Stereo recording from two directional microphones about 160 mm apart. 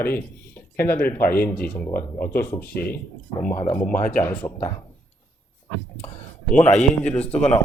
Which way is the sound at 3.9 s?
55° left (ahead or behind).